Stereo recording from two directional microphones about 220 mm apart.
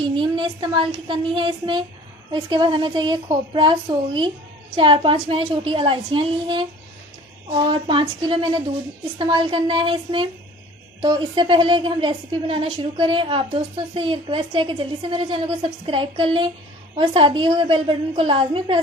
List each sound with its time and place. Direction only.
0.0 s a woman's voice: 20° right (ahead or behind)
7.7 s a woman's voice: 25° right (ahead or behind)